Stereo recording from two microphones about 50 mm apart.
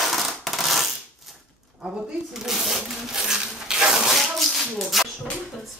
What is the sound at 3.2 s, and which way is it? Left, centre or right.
Rub, centre.